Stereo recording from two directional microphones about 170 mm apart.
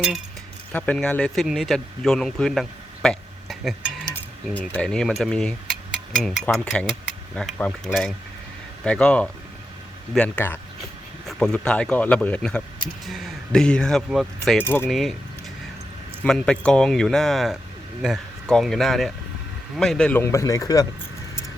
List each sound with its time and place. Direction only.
0.7 s a man's voice: 10° left (ahead or behind)
14.6 s speech: 10° left (ahead or behind)
14.8 s speech: centre (ahead or behind)
16.2 s speech: 5° left (ahead or behind)